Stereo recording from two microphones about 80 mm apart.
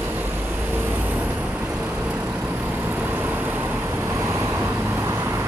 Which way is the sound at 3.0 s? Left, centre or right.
Right.